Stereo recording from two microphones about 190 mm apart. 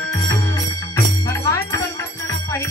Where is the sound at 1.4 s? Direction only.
15° left (ahead or behind).